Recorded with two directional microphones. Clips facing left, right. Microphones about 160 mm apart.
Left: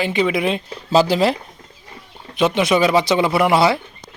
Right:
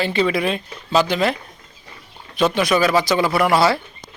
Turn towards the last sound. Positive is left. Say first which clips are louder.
# left 1 dB
turn(degrees=20)  # may be behind; listen again after turning